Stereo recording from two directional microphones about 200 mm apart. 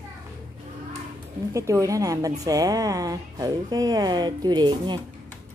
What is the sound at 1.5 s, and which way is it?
Speech, 15° right (ahead or behind).